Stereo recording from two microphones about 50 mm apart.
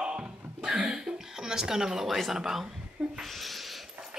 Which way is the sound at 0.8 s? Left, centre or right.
Centre.